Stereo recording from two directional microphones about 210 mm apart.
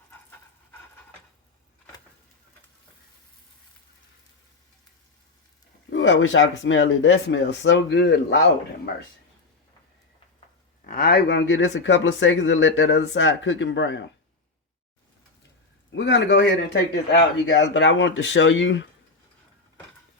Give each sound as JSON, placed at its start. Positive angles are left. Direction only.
{"t": 5.9, "sound": "speech", "side_deg": 65}
{"t": 10.8, "sound": "speech", "side_deg": 45}
{"t": 15.9, "sound": "speech", "side_deg": 60}